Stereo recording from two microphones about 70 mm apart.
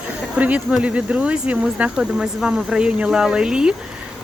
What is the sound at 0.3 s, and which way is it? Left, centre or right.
Speech, centre.